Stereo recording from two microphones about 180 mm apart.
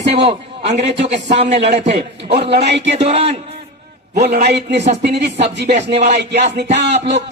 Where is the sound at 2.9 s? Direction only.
35° right (ahead or behind).